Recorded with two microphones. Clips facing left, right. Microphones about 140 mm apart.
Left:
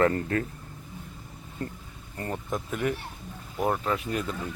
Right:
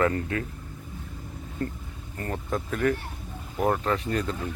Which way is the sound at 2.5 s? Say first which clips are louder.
Right 4 dB; 10° left (ahead or behind).